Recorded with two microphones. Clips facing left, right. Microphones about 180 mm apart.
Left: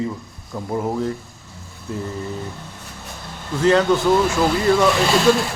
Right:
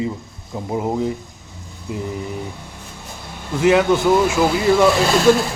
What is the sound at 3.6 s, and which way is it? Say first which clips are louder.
Speech: right 1 dB; 10° right (ahead or behind).